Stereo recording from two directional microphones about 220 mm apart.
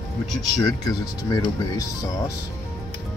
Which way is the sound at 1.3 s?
15° left (ahead or behind).